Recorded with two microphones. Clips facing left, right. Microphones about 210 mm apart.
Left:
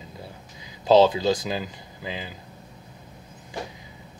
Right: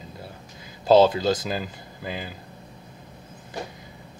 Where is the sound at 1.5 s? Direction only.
50° right (ahead or behind).